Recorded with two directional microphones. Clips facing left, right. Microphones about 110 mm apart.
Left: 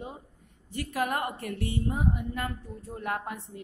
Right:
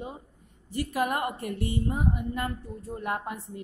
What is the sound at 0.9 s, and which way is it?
A woman's voice, 15° right (ahead or behind).